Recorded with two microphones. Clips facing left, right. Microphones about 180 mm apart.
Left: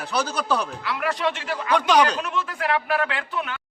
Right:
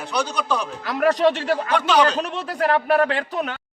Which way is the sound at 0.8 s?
40° right (ahead or behind).